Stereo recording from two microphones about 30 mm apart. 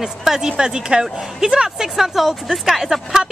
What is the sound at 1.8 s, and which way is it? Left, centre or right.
Speech, centre.